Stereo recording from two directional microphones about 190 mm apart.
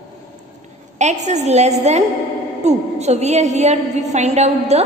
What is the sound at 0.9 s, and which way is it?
A woman's voice, 35° right (ahead or behind).